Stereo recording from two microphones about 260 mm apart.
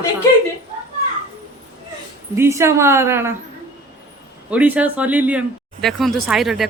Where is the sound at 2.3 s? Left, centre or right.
Centre.